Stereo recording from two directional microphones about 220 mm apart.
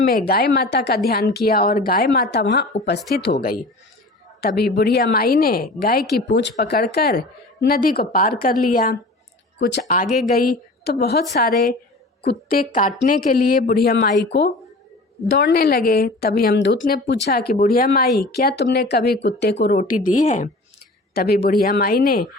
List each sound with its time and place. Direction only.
0.1 s a woman's voice: 45° left (ahead or behind)